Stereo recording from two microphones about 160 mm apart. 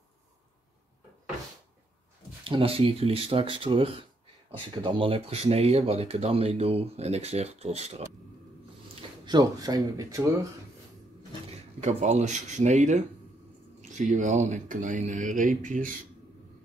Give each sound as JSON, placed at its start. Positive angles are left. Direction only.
{"t": 2.4, "sound": "speech", "side_deg": -35}
{"t": 9.2, "sound": "speech", "side_deg": -25}
{"t": 11.8, "sound": "speech", "side_deg": -45}